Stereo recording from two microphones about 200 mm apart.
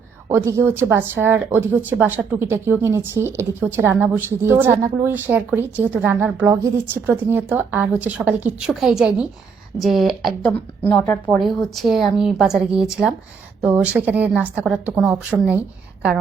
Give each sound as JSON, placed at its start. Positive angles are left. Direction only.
{"t": 0.3, "sound": "speech", "side_deg": -15}